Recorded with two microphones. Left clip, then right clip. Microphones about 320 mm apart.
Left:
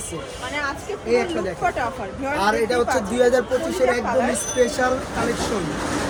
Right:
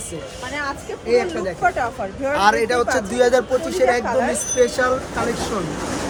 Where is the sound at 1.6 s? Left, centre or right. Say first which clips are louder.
Right 5 dB; right.